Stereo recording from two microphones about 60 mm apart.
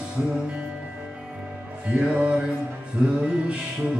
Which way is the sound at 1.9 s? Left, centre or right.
Centre.